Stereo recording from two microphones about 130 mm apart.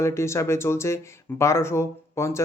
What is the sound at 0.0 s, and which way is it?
Speech, 20° left (ahead or behind).